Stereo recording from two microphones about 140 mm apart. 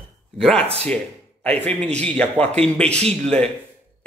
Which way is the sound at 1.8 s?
10° left (ahead or behind).